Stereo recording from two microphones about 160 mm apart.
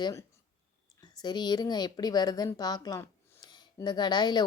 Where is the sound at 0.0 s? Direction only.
20° left (ahead or behind).